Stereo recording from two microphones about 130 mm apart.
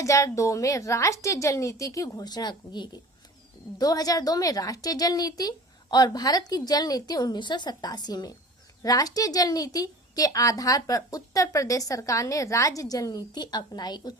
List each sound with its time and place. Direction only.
0.0 s a woman's voice: 25° left (ahead or behind)